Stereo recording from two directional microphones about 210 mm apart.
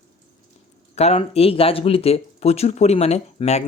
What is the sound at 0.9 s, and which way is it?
Speech, 30° left (ahead or behind).